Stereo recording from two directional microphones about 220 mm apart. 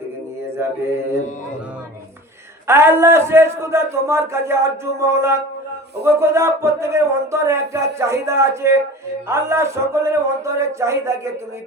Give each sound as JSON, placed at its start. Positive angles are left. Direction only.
{"t": 2.6, "sound": "a man's voice", "side_deg": -10}